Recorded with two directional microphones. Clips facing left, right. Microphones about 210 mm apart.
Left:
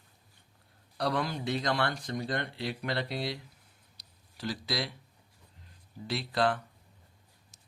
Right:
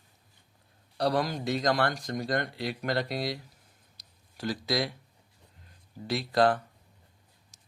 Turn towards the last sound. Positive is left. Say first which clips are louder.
# right 5 dB
turn(degrees=-40)  # may be behind; listen again after turning